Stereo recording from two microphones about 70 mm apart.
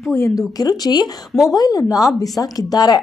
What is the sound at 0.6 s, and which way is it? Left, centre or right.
Speech, left.